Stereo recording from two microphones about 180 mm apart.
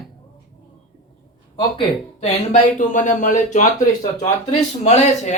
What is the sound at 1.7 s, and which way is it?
Speech, 40° left (ahead or behind).